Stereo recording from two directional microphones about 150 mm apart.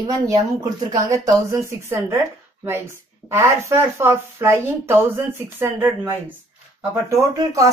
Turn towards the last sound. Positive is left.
turn(degrees=-20)  # may be behind; listen again after turning